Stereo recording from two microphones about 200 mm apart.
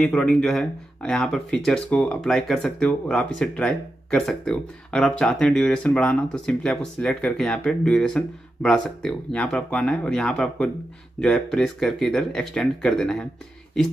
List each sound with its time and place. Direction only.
0.0 s speech: 5° left (ahead or behind)